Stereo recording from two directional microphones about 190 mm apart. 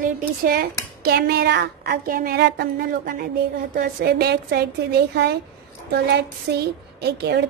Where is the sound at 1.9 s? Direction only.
50° right (ahead or behind).